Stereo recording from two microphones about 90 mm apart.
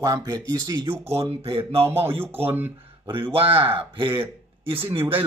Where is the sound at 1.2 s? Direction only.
85° right.